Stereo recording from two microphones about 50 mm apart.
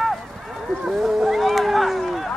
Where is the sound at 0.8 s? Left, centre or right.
Centre.